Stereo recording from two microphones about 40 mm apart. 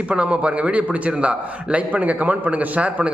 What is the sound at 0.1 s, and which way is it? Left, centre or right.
A man's voice, right.